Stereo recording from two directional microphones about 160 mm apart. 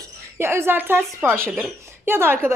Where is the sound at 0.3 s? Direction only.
15° right (ahead or behind).